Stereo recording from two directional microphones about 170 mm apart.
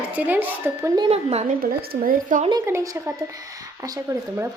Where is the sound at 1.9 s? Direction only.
55° right (ahead or behind).